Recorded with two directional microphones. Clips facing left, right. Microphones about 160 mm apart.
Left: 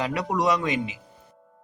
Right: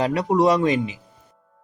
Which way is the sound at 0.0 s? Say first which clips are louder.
Right 6 dB; 35° right (ahead or behind).